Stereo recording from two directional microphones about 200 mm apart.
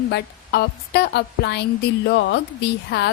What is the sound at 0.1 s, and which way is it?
A woman's voice, 55° left (ahead or behind).